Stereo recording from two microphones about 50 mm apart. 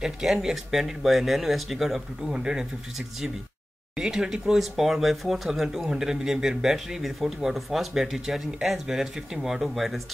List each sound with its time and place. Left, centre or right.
0.0 s speech: centre
2.3 s speech: centre
3.9 s speech: centre